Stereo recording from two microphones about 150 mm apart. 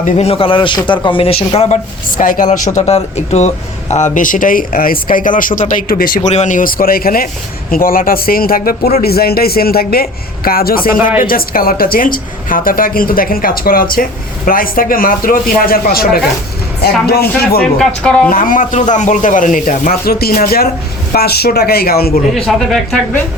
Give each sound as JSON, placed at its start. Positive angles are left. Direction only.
{"t": 0.0, "sound": "a man's voice", "side_deg": 45}
{"t": 2.0, "sound": "speech", "side_deg": 65}
{"t": 2.7, "sound": "a woman's voice", "side_deg": 45}
{"t": 17.6, "sound": "speech", "side_deg": 5}
{"t": 18.3, "sound": "speech", "side_deg": 70}
{"t": 22.4, "sound": "speech", "side_deg": 0}